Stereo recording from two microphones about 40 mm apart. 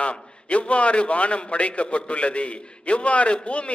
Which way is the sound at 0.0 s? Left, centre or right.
Left.